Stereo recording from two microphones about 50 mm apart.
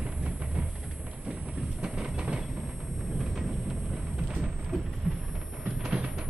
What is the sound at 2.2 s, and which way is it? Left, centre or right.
Vehicle, right.